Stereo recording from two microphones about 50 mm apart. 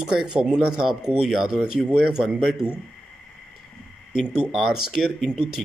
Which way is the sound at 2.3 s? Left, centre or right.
Centre.